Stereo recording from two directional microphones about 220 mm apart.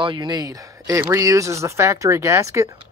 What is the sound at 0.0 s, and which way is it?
Speech, 20° right (ahead or behind).